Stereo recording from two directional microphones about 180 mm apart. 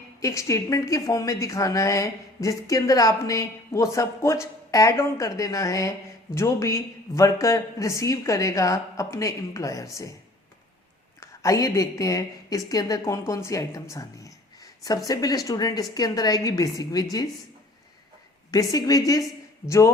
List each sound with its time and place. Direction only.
0.2 s a woman's voice: 15° left (ahead or behind)
11.2 s a woman's voice: 20° left (ahead or behind)
13.9 s a sound: 20° left (ahead or behind)
15.4 s a woman's voice: 20° left (ahead or behind)
18.5 s a woman's voice: 20° left (ahead or behind)